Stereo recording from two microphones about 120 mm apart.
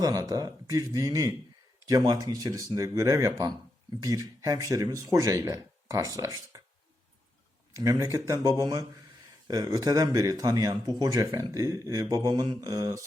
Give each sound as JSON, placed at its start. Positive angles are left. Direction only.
{"t": 0.0, "sound": "speech", "side_deg": -30}
{"t": 7.7, "sound": "speech", "side_deg": -30}